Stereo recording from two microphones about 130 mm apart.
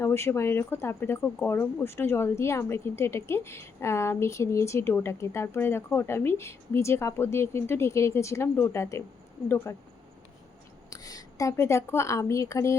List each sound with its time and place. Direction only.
0.0 s a woman's voice: 20° left (ahead or behind)
10.8 s a woman's voice: 25° left (ahead or behind)